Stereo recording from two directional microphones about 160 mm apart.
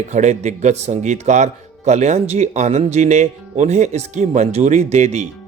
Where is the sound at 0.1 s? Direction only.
45° right (ahead or behind).